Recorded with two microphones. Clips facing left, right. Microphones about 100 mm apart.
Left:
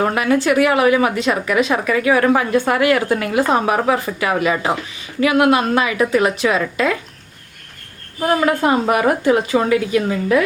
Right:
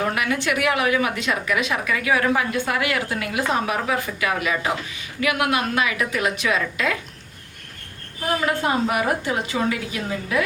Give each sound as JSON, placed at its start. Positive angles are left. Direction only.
{"t": 0.0, "sound": "a woman's voice", "side_deg": 35}
{"t": 8.3, "sound": "a woman's voice", "side_deg": 50}